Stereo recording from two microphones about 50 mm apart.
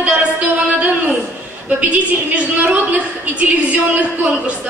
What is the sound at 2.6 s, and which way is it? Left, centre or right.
Speech, right.